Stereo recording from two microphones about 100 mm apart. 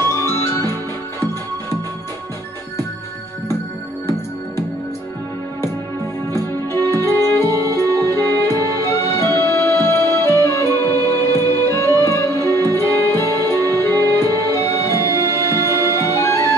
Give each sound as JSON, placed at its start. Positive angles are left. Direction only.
{"t": 0.1, "sound": "music", "side_deg": 25}
{"t": 6.3, "sound": "music", "side_deg": 25}